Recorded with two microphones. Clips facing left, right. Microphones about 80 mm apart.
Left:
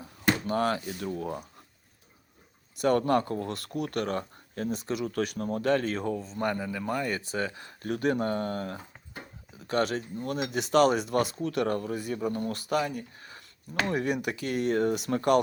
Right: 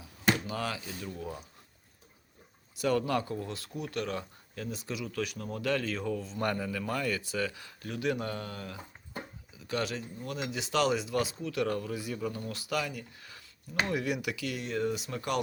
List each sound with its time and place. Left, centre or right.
0.0 s speech: left
2.7 s speech: left
6.1 s speech: centre
7.1 s speech: left